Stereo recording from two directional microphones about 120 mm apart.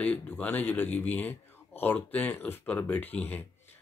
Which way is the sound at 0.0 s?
15° left (ahead or behind).